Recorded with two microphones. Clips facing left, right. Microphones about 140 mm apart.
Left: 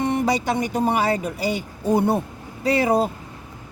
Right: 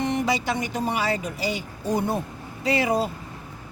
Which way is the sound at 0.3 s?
50° left (ahead or behind).